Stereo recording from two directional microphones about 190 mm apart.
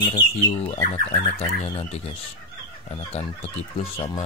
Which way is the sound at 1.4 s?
15° left (ahead or behind).